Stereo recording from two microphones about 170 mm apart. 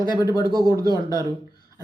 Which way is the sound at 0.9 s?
20° right (ahead or behind).